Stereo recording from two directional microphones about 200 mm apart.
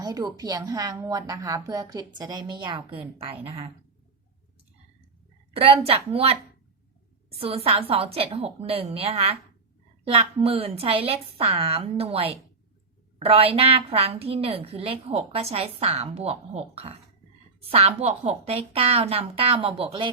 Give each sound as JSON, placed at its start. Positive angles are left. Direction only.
{"t": 0.0, "sound": "a woman's voice", "side_deg": -20}
{"t": 5.5, "sound": "a woman's voice", "side_deg": -30}
{"t": 7.3, "sound": "a woman's voice", "side_deg": -30}